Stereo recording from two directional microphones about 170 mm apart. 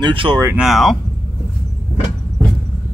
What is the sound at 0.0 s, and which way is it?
Speech, 30° right (ahead or behind).